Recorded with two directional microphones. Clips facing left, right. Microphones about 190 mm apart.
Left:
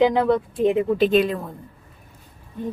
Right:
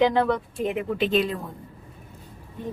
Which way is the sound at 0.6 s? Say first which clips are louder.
Left 8 dB; 30° left (ahead or behind).